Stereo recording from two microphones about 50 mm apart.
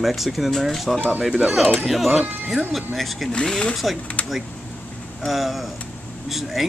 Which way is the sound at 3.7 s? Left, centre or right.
Centre.